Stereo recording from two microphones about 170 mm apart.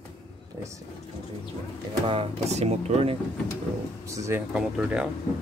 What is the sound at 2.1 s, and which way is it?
Speech, 35° right (ahead or behind).